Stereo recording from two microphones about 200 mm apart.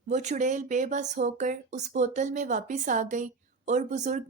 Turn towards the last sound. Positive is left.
turn(degrees=-35)  # may be behind; listen again after turning